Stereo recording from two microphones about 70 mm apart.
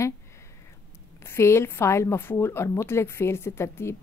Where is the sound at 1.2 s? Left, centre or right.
Left.